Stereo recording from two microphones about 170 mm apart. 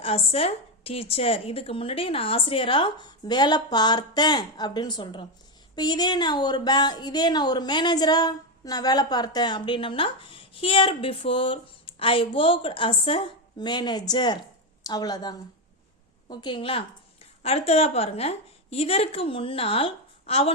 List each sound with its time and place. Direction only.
0.0 s a woman's voice: 35° left (ahead or behind)